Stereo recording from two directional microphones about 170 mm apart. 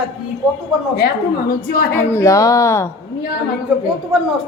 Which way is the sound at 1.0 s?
65° left (ahead or behind).